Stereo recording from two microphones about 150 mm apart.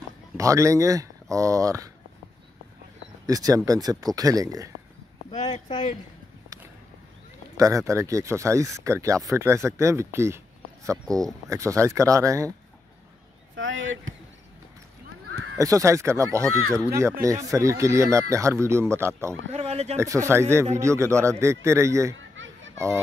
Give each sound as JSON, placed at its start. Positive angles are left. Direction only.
{"t": 0.4, "sound": "speech", "side_deg": -20}
{"t": 3.3, "sound": "speech", "side_deg": -25}
{"t": 5.4, "sound": "speech", "side_deg": 30}
{"t": 7.5, "sound": "speech", "side_deg": -20}
{"t": 11.4, "sound": "speech", "side_deg": -20}
{"t": 15.5, "sound": "speech", "side_deg": -20}
{"t": 19.5, "sound": "speech", "side_deg": -45}
{"t": 20.0, "sound": "speech", "side_deg": -20}